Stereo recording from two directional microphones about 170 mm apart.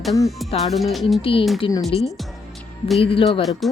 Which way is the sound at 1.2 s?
35° left (ahead or behind).